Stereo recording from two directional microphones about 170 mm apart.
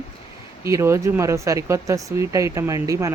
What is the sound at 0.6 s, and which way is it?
Speech, 15° right (ahead or behind).